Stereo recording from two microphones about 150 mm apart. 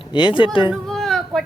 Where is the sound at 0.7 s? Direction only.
5° left (ahead or behind).